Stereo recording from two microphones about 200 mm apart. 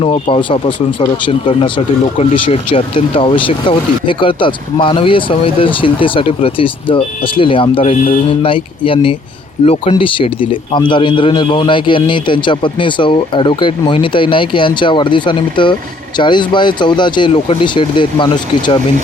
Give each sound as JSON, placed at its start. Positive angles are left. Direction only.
{"t": 0.0, "sound": "speech", "side_deg": 30}